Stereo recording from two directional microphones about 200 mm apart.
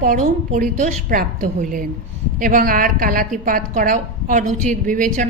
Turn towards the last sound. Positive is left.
turn(degrees=-40)  # may be behind; listen again after turning